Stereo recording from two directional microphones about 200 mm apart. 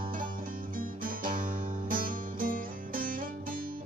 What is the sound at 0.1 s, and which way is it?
Music, 45° right (ahead or behind).